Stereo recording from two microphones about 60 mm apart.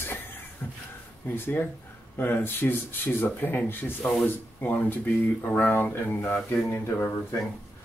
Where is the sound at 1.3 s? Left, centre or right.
Left.